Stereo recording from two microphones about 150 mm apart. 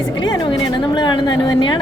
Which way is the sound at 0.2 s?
30° left (ahead or behind).